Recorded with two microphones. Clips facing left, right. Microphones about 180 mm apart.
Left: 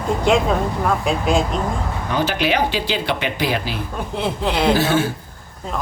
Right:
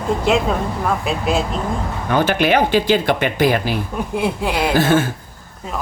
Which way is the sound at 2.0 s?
55° right (ahead or behind).